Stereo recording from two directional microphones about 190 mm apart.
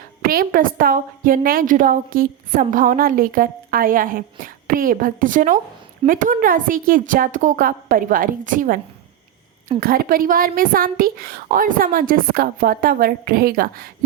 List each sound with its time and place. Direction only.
0.2 s a woman's voice: 50° right (ahead or behind)
9.8 s a woman's voice: 50° right (ahead or behind)